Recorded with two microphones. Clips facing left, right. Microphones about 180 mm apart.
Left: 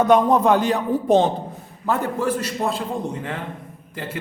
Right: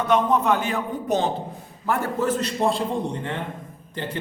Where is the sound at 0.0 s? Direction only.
35° left (ahead or behind).